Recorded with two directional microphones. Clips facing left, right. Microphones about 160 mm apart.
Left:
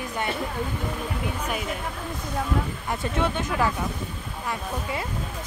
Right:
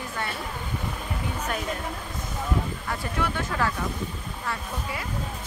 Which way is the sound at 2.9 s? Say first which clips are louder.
Left 6 dB; 20° left (ahead or behind).